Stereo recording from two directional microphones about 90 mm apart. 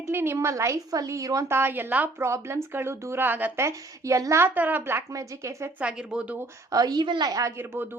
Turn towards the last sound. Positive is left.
turn(degrees=-25)  # may be behind; listen again after turning